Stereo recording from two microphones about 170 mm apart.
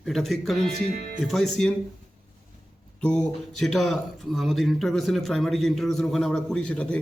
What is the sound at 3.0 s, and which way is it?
Speech, 5° left (ahead or behind).